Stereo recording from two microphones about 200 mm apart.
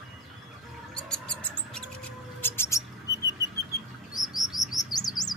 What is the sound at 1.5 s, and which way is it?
Music, 5° left (ahead or behind).